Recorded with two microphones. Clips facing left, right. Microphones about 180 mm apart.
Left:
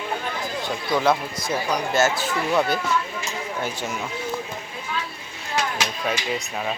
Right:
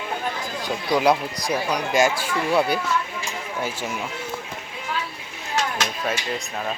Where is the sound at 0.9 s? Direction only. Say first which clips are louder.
Right 2 dB; 15° right (ahead or behind).